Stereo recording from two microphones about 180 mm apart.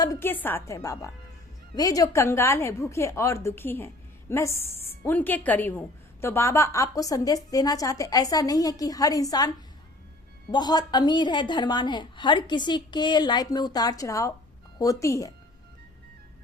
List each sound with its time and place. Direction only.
0.0 s a woman's voice: 15° left (ahead or behind)
10.5 s a woman's voice: 20° left (ahead or behind)